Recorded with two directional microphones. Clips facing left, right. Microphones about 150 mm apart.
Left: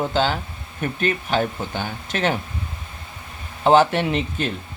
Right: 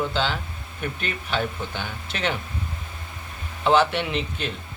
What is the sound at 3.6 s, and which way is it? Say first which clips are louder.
Speech: left 4 dB; 45° left (ahead or behind).